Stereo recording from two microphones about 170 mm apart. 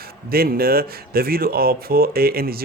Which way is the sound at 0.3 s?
65° right (ahead or behind).